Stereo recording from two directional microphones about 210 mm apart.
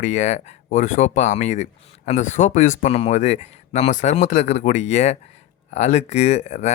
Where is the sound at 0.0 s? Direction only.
35° left (ahead or behind).